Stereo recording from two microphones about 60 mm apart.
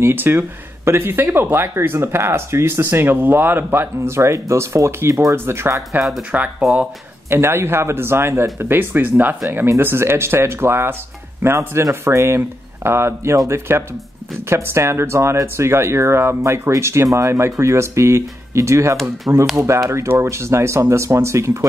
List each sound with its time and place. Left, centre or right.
0.0 s a man's voice: right
5.3 s speech: right
6.3 s speech: right
7.2 s a man's voice: right